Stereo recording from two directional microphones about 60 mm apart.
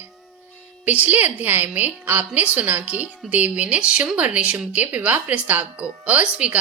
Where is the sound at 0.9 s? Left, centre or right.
Right.